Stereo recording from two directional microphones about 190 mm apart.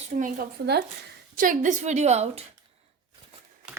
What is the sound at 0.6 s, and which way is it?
Speech, 60° right (ahead or behind).